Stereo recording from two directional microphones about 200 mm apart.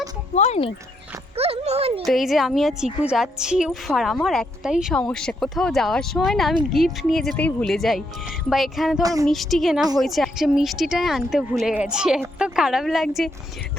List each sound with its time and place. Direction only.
0.3 s speech: 35° left (ahead or behind)
1.4 s speech: 30° right (ahead or behind)
2.0 s a woman's voice: centre (ahead or behind)